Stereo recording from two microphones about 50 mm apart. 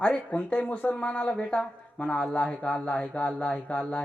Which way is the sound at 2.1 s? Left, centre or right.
Left.